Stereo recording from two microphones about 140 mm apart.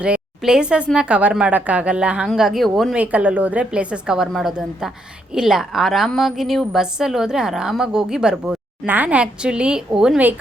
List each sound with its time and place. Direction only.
0.0 s a woman's voice: 5° right (ahead or behind)
3.0 s a woman's voice: 10° right (ahead or behind)